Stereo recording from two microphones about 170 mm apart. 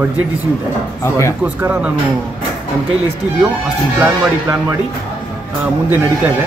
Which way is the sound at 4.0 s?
10° right (ahead or behind).